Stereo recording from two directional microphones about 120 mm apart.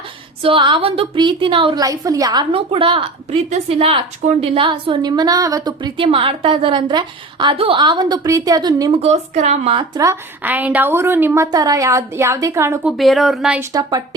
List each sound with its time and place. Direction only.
0.4 s a woman's voice: 45° right (ahead or behind)
1.8 s a woman's voice: 30° right (ahead or behind)
2.5 s a woman's voice: 50° right (ahead or behind)
3.2 s a woman's voice: 60° right (ahead or behind); by 8.9 s 35° right (ahead or behind)
8.9 s speech: 60° right (ahead or behind)
10.4 s a woman's voice: 15° right (ahead or behind)
11.5 s a woman's voice: 30° right (ahead or behind)
13.0 s speech: centre (ahead or behind)
13.7 s speech: 35° right (ahead or behind)